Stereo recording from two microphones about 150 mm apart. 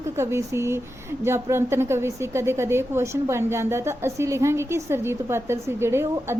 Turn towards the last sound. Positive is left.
turn(degrees=-15)  # may be behind; listen again after turning